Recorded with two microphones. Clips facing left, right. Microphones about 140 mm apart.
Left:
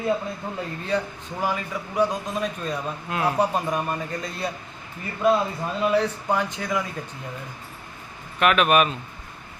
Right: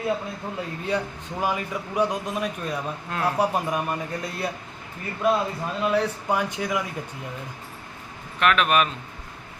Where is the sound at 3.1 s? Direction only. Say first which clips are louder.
Left 2 dB; 5° left (ahead or behind).